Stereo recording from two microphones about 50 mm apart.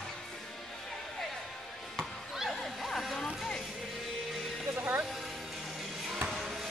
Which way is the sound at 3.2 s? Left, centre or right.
Centre.